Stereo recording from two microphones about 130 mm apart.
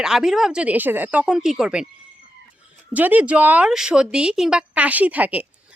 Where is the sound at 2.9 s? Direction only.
10° right (ahead or behind).